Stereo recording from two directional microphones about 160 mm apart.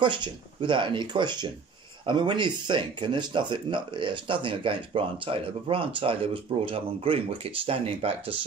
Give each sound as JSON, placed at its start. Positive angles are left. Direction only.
{"t": 0.0, "sound": "speech", "side_deg": -30}